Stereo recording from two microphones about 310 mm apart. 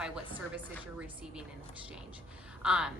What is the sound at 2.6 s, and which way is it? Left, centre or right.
Speech, centre.